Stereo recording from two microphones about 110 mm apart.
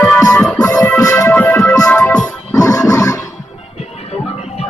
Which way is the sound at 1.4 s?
15° left (ahead or behind).